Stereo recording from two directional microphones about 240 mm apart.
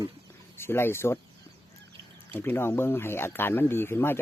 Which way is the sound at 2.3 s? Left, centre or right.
Centre.